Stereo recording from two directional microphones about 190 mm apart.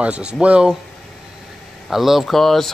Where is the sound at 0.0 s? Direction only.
5° right (ahead or behind).